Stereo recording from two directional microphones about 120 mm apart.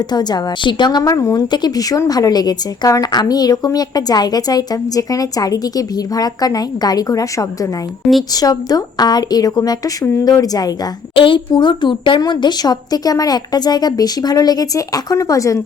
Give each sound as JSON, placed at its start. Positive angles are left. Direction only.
{"t": 0.1, "sound": "a woman's voice", "side_deg": 35}
{"t": 11.1, "sound": "a woman's voice", "side_deg": 45}